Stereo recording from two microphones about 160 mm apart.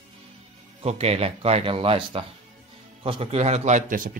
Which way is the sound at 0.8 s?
40° right (ahead or behind).